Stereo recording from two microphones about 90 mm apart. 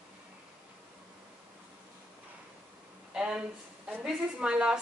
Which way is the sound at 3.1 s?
10° right (ahead or behind).